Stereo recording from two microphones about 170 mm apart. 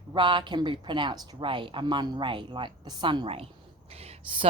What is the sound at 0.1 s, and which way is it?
Speech, 30° right (ahead or behind).